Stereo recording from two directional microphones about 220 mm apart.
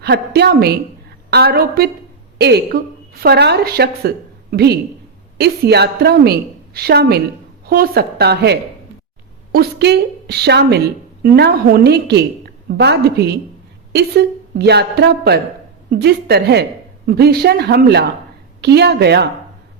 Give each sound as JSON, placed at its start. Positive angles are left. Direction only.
{"t": 0.0, "sound": "a woman's voice", "side_deg": -50}